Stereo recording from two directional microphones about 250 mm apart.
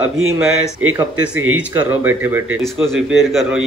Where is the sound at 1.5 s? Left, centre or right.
Centre.